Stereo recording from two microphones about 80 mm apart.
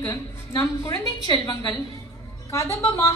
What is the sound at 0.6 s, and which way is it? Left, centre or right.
Speech, left.